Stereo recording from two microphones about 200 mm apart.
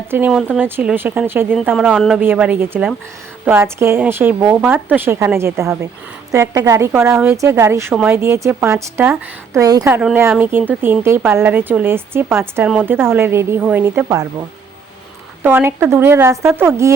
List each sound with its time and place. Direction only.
0.1 s a woman's voice: 5° right (ahead or behind)
15.4 s a woman's voice: 10° right (ahead or behind)